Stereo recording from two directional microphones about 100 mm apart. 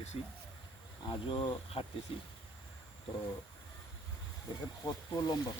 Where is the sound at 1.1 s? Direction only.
55° left (ahead or behind).